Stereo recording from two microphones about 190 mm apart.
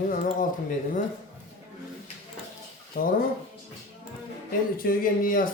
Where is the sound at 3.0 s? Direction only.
50° left (ahead or behind).